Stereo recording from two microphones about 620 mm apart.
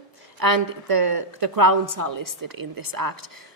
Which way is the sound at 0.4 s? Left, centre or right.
Right.